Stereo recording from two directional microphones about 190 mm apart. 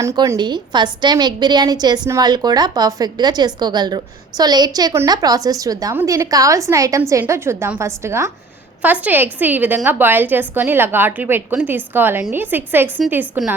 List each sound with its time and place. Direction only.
0.0 s a woman's voice: 15° right (ahead or behind)